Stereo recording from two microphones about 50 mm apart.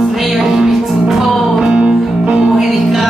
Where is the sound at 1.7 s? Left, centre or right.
Right.